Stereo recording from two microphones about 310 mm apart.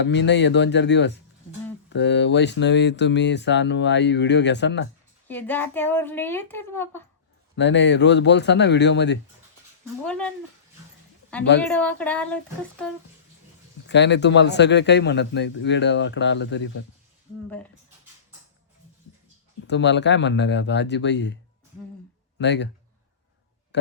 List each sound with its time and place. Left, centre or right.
0.0 s speech: left
5.3 s speech: centre
7.5 s speech: left
11.3 s speech: centre
13.8 s speech: left
19.6 s speech: left
22.4 s speech: left